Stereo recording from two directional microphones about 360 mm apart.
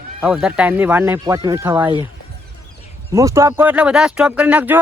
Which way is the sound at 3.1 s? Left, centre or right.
Centre.